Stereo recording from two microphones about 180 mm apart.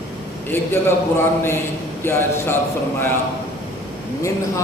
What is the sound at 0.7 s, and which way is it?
Speech, 15° left (ahead or behind).